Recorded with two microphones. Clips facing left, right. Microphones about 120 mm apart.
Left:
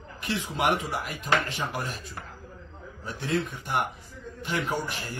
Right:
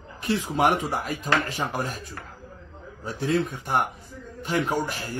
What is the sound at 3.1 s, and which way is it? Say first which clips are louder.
A man's voice: right 4 dB; 40° right (ahead or behind).